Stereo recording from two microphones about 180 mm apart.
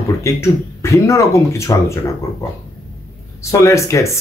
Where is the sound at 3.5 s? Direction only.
20° left (ahead or behind).